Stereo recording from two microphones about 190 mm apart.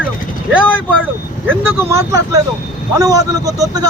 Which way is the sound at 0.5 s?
5° right (ahead or behind).